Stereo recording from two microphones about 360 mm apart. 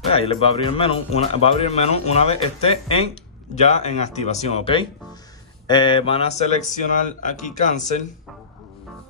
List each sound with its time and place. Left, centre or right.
0.1 s speech: centre